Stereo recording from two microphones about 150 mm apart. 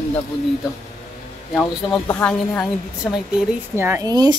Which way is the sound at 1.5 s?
Centre (ahead or behind).